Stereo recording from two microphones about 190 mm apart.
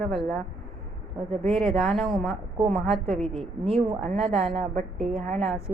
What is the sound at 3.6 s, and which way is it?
Speech, 35° right (ahead or behind).